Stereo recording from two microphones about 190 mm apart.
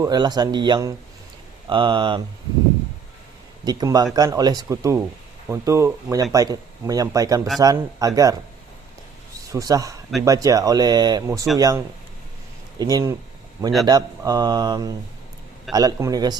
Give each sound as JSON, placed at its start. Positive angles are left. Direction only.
{"t": 0.0, "sound": "speech", "side_deg": -20}
{"t": 3.6, "sound": "speech", "side_deg": -20}
{"t": 9.5, "sound": "speech", "side_deg": -15}
{"t": 12.8, "sound": "speech", "side_deg": -20}